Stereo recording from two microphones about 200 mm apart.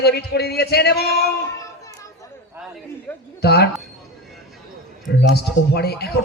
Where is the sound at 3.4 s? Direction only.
55° left (ahead or behind).